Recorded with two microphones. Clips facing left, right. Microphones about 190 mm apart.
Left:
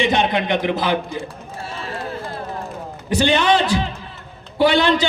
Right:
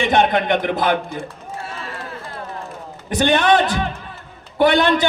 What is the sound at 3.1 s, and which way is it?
A man's voice, 55° right (ahead or behind).